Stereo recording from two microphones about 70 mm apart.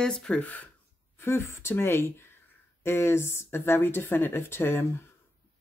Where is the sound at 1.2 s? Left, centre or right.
Left.